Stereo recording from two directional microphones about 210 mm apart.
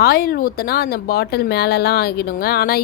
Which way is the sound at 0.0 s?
45° left (ahead or behind).